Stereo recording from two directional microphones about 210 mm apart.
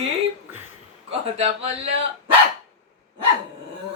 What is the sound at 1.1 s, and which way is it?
Speech, 30° right (ahead or behind).